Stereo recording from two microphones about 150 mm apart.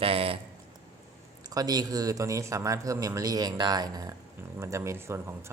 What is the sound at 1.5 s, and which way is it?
Speech, 25° right (ahead or behind).